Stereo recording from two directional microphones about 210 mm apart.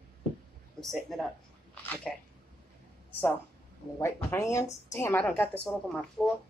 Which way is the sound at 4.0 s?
15° left (ahead or behind).